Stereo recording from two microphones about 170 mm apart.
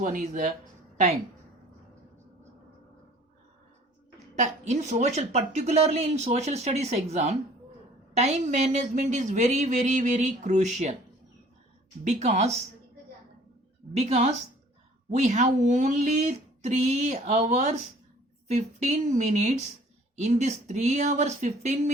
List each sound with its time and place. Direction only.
0.0 s speech: 50° right (ahead or behind)
4.4 s speech: 40° right (ahead or behind)
12.0 s speech: 40° right (ahead or behind)
13.9 s speech: 40° right (ahead or behind)